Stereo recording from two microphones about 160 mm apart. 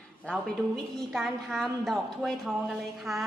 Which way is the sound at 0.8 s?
Centre (ahead or behind).